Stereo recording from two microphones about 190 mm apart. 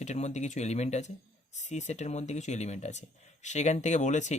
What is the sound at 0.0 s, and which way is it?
Speech, 35° left (ahead or behind).